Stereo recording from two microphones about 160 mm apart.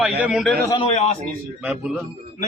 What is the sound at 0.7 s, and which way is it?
Speech, 40° left (ahead or behind).